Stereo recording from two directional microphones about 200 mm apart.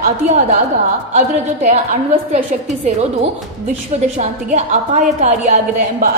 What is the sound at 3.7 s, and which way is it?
A woman's voice, 35° right (ahead or behind).